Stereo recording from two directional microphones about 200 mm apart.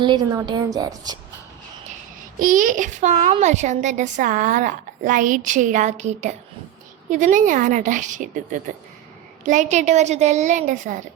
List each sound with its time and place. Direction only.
0.0 s a woman's voice: 20° right (ahead or behind)
2.4 s a child's voice: 40° right (ahead or behind)